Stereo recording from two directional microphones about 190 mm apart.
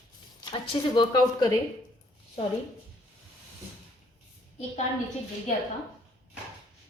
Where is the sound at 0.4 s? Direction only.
25° left (ahead or behind).